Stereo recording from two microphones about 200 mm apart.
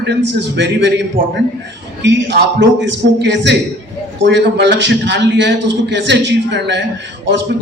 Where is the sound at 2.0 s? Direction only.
60° right (ahead or behind).